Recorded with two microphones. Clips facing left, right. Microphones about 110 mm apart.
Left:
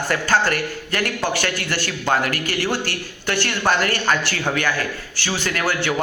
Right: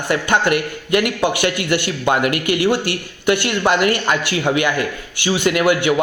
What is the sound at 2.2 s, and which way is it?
Speech, 40° left (ahead or behind).